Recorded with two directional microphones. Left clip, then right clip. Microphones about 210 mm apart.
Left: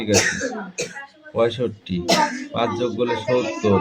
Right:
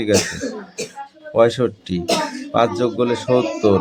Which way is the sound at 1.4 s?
30° right (ahead or behind).